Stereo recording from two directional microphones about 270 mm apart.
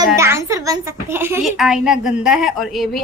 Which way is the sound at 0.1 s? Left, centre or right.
Centre.